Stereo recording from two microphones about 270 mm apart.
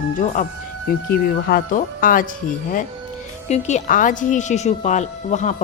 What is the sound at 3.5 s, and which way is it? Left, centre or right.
Speech, left.